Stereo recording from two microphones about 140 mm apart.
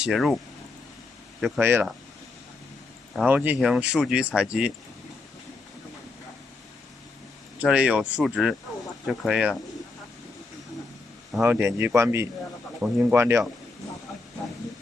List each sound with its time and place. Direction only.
0.0 s speech: centre (ahead or behind)
1.6 s speech: 15° right (ahead or behind)
3.3 s speech: 10° right (ahead or behind)
7.5 s speech: 10° right (ahead or behind)
11.4 s speech: 15° right (ahead or behind)